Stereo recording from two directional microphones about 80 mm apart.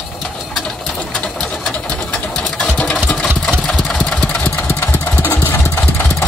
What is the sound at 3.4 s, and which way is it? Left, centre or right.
Engine, centre.